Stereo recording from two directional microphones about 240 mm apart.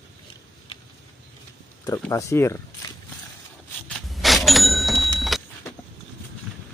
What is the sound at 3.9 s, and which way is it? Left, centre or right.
Cash register, centre.